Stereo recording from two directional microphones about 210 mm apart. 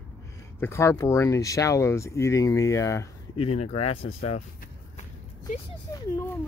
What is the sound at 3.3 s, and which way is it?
Speech, 30° left (ahead or behind).